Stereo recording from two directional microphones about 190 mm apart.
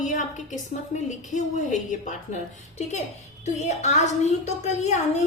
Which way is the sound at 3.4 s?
35° left (ahead or behind).